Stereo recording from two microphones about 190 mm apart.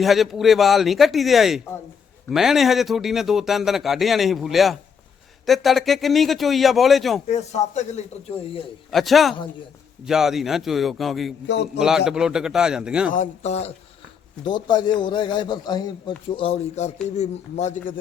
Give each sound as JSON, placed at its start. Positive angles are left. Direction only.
{"t": 0.0, "sound": "a man's voice", "side_deg": 0}
{"t": 7.3, "sound": "speech", "side_deg": 35}
{"t": 8.9, "sound": "a man's voice", "side_deg": 0}
{"t": 11.4, "sound": "a man's voice", "side_deg": 65}
{"t": 11.8, "sound": "a man's voice", "side_deg": -5}
{"t": 13.1, "sound": "speech", "side_deg": 35}
{"t": 14.4, "sound": "speech", "side_deg": 25}